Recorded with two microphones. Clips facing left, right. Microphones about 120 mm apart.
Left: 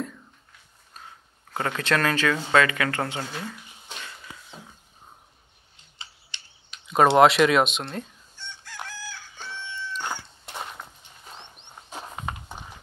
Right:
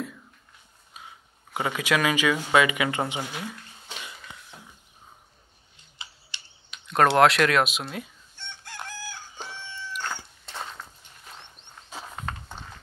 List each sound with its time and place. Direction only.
0.9 s speech: 10° right (ahead or behind)
4.5 s a sound: 15° left (ahead or behind)
7.2 s speech: centre (ahead or behind)
8.4 s crowing: 55° right (ahead or behind)
8.8 s chicken: 50° right (ahead or behind)
9.4 s crowing: 45° right (ahead or behind)
10.0 s walk: 15° left (ahead or behind)